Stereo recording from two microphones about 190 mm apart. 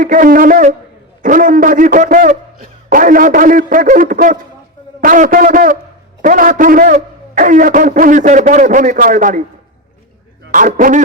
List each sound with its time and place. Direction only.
0.0 s a man's voice: 45° right (ahead or behind)
10.5 s a man's voice: 45° right (ahead or behind)